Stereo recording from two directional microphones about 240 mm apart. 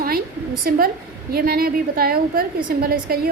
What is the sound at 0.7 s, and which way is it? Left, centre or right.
A woman's voice, right.